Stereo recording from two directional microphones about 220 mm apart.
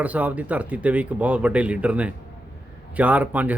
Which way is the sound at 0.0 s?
5° right (ahead or behind).